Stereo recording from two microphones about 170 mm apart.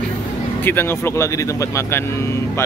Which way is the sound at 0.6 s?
15° left (ahead or behind).